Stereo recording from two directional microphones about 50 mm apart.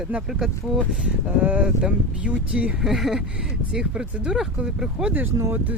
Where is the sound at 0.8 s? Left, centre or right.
Right.